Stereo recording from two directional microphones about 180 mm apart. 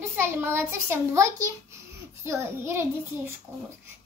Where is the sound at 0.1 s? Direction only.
10° right (ahead or behind).